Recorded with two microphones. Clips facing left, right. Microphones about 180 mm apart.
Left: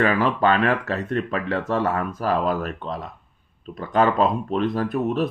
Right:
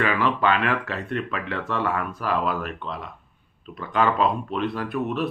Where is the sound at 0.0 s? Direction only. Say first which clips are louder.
Left 3 dB; 40° left (ahead or behind).